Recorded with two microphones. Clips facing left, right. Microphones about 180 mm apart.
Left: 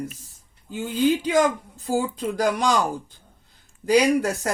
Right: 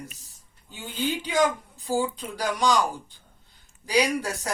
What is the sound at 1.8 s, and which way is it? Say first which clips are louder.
Speech: left 3 dB; 45° left (ahead or behind).